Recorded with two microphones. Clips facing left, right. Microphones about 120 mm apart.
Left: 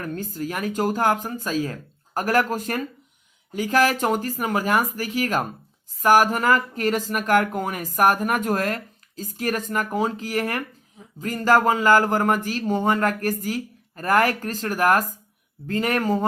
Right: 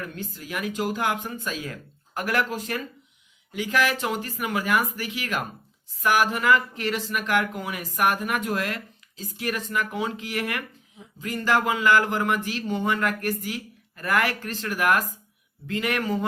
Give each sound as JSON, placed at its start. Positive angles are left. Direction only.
{"t": 0.0, "sound": "speech", "side_deg": 40}